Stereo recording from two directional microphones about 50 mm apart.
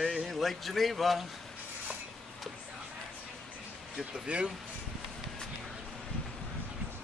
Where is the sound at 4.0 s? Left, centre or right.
Centre.